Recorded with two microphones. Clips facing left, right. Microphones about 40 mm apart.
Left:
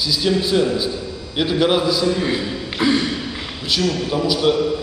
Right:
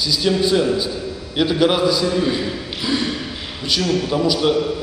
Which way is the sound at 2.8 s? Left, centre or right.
Left.